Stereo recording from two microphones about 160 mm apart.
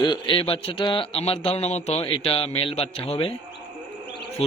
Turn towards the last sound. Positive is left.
turn(degrees=40)  # may be behind; listen again after turning